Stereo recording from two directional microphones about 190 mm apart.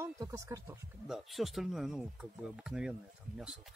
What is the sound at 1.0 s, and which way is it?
Speech, centre (ahead or behind).